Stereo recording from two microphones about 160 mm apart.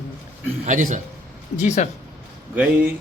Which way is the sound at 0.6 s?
55° right (ahead or behind).